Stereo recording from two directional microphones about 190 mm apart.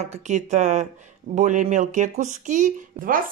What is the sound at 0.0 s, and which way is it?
Speech, 35° right (ahead or behind).